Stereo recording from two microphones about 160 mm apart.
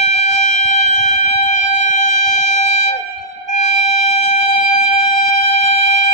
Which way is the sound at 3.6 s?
45° left (ahead or behind).